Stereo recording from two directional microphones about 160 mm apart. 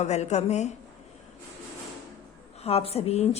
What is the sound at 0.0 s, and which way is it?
Speech, 45° left (ahead or behind).